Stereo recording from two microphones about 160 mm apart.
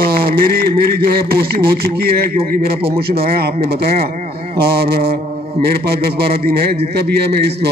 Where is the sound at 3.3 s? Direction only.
80° right.